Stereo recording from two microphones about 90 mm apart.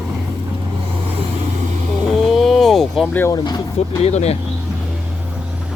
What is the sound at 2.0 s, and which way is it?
Vehicle, centre (ahead or behind).